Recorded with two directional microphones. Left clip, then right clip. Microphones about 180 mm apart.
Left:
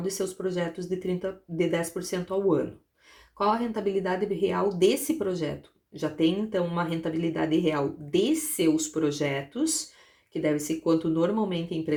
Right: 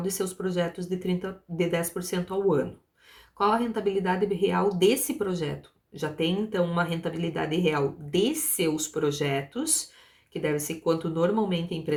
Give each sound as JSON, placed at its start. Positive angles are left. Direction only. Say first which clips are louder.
{"t": 0.0, "sound": "speech", "louder": "even", "side_deg": 20}